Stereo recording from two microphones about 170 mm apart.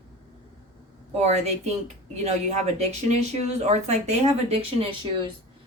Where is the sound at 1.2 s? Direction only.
40° right (ahead or behind).